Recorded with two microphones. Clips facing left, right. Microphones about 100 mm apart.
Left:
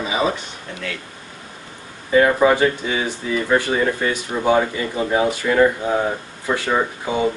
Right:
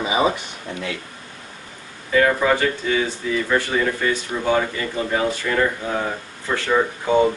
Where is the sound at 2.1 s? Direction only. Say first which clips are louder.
Left 3 dB; 20° left (ahead or behind).